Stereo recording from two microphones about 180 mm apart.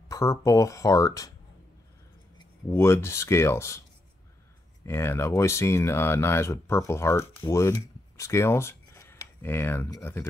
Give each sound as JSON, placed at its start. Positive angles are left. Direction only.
{"t": 0.1, "sound": "speech", "side_deg": 20}
{"t": 2.3, "sound": "speech", "side_deg": 15}
{"t": 4.8, "sound": "speech", "side_deg": 15}